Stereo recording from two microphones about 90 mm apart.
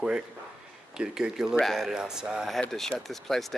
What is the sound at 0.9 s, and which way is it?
Speech, 10° right (ahead or behind).